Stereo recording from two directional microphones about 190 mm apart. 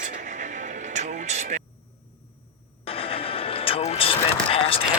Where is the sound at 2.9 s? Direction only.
30° left (ahead or behind).